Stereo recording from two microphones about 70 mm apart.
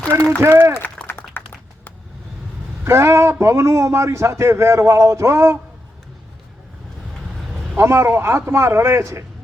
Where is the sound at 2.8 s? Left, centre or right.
Right.